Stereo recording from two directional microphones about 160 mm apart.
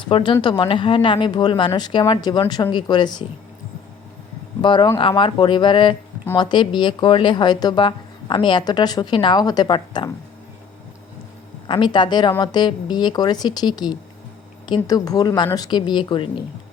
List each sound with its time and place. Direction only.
0.1 s speech: 35° left (ahead or behind)
4.6 s speech: 30° left (ahead or behind)
11.7 s speech: 30° left (ahead or behind)